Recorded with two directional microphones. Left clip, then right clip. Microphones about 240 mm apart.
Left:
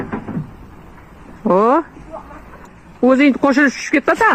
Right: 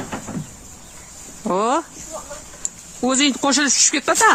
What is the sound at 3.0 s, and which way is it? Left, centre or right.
Speech, centre.